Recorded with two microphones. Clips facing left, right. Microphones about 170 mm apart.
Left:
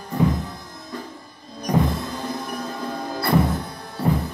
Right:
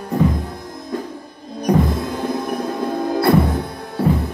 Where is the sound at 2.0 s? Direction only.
60° right (ahead or behind).